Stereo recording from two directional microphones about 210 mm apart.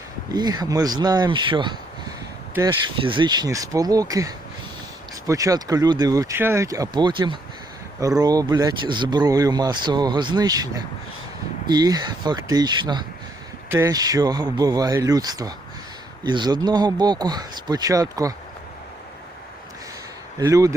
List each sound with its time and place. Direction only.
0.3 s speech: 20° right (ahead or behind)
20.4 s speech: 15° right (ahead or behind)